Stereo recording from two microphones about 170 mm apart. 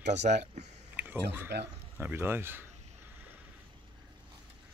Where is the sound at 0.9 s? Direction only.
10° right (ahead or behind).